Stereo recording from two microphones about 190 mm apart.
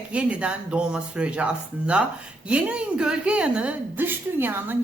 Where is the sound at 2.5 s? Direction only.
5° right (ahead or behind).